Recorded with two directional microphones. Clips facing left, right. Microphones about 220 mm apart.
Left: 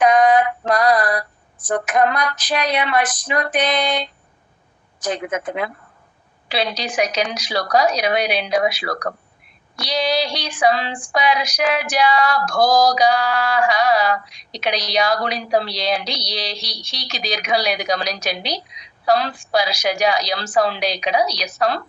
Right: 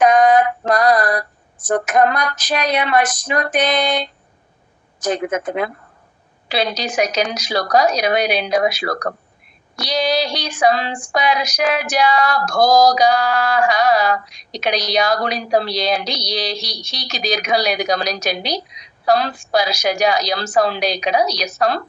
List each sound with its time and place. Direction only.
0.0 s female singing: 45° right (ahead or behind)